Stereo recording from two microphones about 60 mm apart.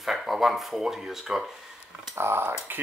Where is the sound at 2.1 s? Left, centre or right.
Right.